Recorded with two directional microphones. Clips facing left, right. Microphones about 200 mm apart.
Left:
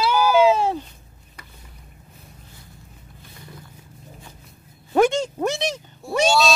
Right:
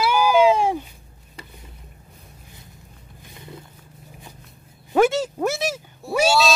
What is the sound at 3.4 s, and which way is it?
Roaring cats, 20° right (ahead or behind).